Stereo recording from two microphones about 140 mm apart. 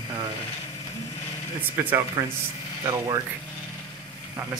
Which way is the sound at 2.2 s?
30° right (ahead or behind).